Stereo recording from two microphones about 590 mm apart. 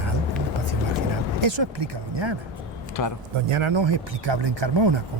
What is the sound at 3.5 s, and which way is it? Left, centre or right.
Speech, right.